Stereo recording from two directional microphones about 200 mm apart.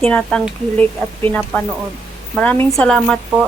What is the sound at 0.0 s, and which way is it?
Speech, 5° left (ahead or behind).